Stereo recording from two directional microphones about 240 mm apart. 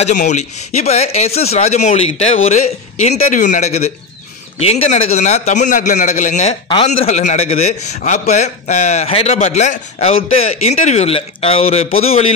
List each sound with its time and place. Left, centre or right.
0.0 s a man's voice: left